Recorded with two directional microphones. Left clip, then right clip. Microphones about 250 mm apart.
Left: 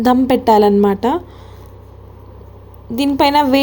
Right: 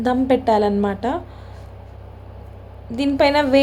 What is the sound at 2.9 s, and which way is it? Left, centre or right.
Speech, centre.